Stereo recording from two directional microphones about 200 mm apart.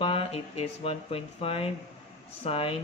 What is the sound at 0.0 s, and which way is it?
Speech, 30° left (ahead or behind).